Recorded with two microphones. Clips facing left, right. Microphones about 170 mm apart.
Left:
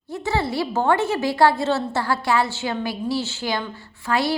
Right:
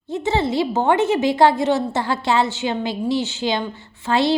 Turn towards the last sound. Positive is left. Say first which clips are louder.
# right 4 dB
turn(degrees=-25)  # may be behind; listen again after turning